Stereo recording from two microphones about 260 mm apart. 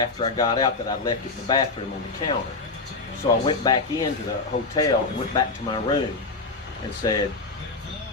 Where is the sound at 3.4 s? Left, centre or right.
Centre.